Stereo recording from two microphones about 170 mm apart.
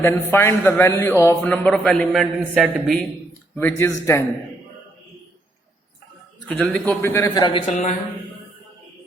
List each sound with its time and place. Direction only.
0.0 s a man's voice: 15° left (ahead or behind); by 3.0 s centre (ahead or behind)
3.6 s a man's voice: 15° left (ahead or behind)
6.5 s a man's voice: 5° left (ahead or behind)
7.0 s a man's voice: 15° left (ahead or behind)
7.7 s a man's voice: 45° left (ahead or behind)